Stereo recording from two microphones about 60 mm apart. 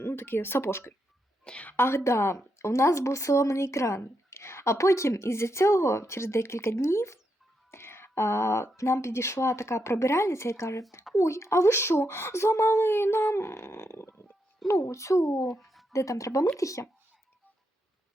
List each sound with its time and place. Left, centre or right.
0.0 s speech: left
1.5 s a woman's voice: left
1.7 s speech: left
14.7 s speech: left
15.6 s a sound: centre
15.9 s speech: left